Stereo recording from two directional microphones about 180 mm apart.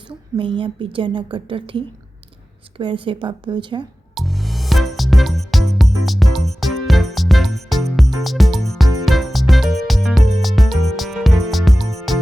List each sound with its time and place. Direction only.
0.1 s a woman's voice: 30° right (ahead or behind)
4.1 s music: centre (ahead or behind)